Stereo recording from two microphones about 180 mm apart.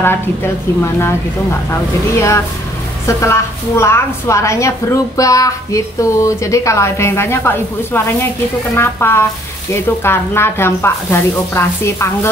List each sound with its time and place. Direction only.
0.0 s a woman's voice: 10° left (ahead or behind)
1.7 s a woman's voice: 15° left (ahead or behind)